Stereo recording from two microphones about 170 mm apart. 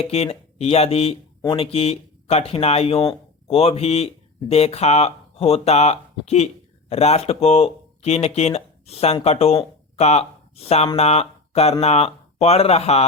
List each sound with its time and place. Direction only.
0.0 s speech: 35° left (ahead or behind)
3.0 s a sound: 20° left (ahead or behind)
3.5 s speech: 35° left (ahead or behind)